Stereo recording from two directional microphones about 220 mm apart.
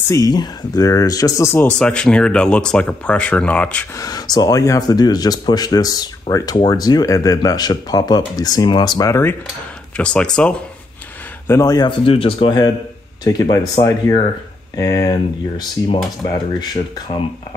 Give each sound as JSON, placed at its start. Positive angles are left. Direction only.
{"t": 0.1, "sound": "speech", "side_deg": 15}
{"t": 4.0, "sound": "speech", "side_deg": 15}
{"t": 11.4, "sound": "speech", "side_deg": 15}